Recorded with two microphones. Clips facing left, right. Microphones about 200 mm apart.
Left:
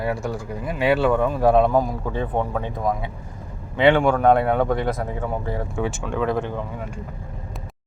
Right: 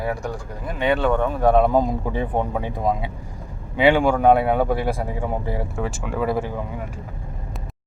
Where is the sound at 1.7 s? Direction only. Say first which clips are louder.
Right 1 dB; 20° right (ahead or behind).